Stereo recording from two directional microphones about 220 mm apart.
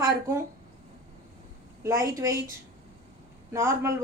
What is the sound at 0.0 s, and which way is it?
Speech, 15° right (ahead or behind).